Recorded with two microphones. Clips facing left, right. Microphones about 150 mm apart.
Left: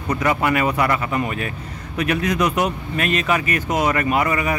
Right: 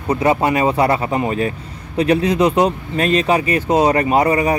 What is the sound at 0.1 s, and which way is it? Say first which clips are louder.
Speech: right 4 dB; 30° right (ahead or behind).